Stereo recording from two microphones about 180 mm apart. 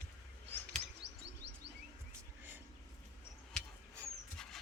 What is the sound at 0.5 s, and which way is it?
Chirp, 10° left (ahead or behind).